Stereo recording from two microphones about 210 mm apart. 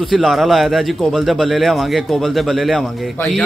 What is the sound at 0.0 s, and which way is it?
A man's voice, centre (ahead or behind).